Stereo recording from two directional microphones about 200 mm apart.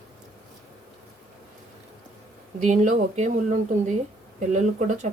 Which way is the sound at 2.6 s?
35° right (ahead or behind).